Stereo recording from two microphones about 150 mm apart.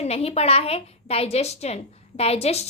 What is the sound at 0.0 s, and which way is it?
A woman's voice, 45° left (ahead or behind).